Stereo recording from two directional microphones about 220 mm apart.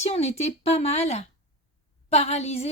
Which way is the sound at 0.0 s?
30° left (ahead or behind).